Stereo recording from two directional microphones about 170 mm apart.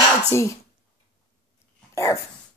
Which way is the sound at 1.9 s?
20° left (ahead or behind).